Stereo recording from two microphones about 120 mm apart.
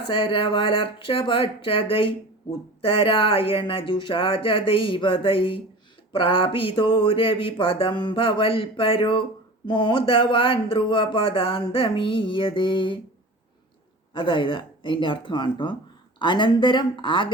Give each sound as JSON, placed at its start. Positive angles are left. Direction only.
{"t": 0.1, "sound": "speech", "side_deg": 50}
{"t": 14.1, "sound": "speech", "side_deg": 45}